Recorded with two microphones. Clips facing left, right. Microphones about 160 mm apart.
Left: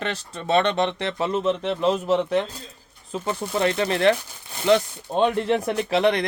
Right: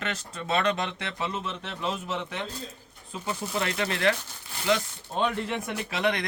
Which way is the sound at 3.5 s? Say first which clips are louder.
Left 8 dB; 30° left (ahead or behind).